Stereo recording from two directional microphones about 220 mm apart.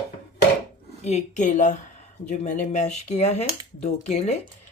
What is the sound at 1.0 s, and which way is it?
Speech, 30° left (ahead or behind).